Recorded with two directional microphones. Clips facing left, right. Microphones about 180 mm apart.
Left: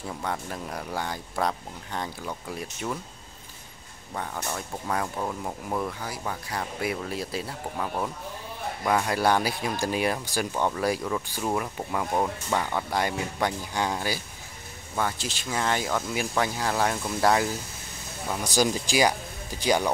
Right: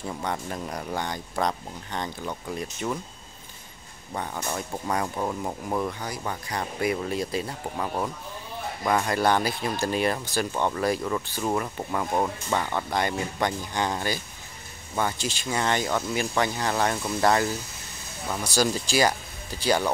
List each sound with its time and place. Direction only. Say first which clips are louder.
0.2 s speech: even; 5° left (ahead or behind)
4.1 s speech: right 2 dB; centre (ahead or behind)